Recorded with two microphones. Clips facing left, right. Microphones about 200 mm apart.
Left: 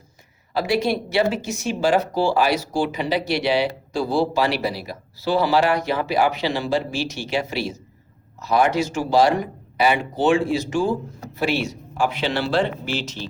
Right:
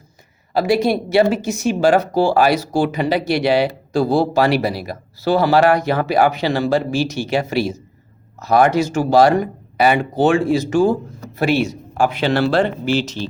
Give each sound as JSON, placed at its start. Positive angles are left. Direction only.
{"t": 0.5, "sound": "speech", "side_deg": -50}